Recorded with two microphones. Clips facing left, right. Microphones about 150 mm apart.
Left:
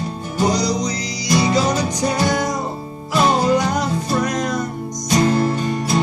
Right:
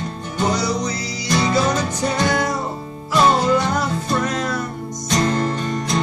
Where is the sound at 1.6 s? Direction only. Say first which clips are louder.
Left 1 dB; 35° left (ahead or behind).